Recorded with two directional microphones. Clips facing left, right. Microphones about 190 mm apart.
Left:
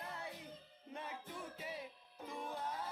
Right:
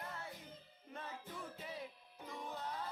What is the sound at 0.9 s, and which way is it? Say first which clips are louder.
Music: left 1 dB; 15° left (ahead or behind).